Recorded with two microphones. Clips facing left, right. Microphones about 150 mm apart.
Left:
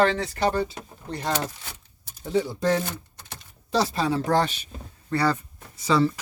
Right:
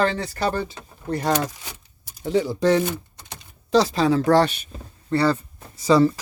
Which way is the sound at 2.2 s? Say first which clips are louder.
Right 4 dB; 90° right.